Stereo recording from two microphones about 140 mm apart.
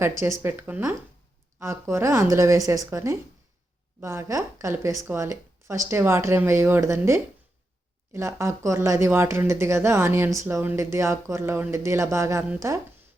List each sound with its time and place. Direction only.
0.0 s speech: 20° right (ahead or behind)